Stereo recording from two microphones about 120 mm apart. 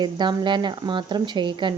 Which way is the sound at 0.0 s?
40° right (ahead or behind).